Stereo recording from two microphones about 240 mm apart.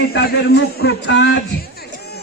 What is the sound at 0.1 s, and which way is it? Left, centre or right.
A man's voice, left.